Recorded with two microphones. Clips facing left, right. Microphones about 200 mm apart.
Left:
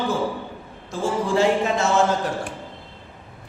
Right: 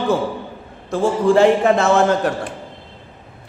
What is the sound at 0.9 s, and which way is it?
A man's voice, 60° right (ahead or behind).